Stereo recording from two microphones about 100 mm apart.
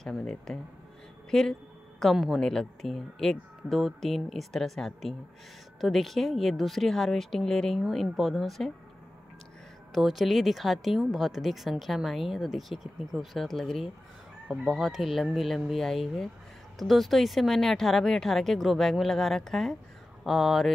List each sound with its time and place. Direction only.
0.0 s speech: 5° left (ahead or behind)
9.9 s speech: centre (ahead or behind)